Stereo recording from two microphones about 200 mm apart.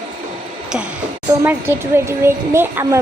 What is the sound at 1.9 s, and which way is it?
A woman's voice, 10° right (ahead or behind).